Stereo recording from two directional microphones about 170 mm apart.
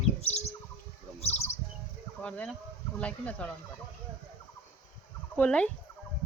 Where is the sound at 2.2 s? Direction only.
10° left (ahead or behind).